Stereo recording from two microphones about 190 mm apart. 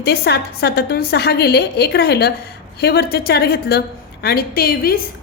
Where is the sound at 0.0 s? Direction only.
55° left (ahead or behind).